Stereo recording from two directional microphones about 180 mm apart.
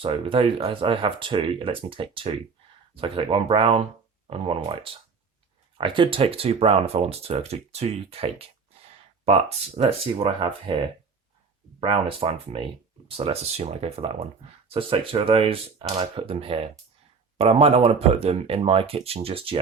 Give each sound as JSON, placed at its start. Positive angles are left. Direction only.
{"t": 0.0, "sound": "speech", "side_deg": -30}